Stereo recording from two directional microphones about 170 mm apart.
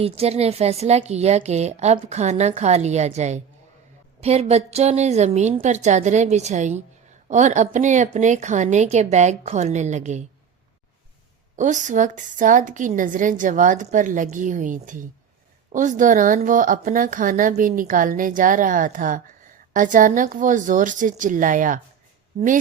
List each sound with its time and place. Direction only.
0.0 s a woman's voice: 35° right (ahead or behind)
11.5 s a woman's voice: 45° right (ahead or behind)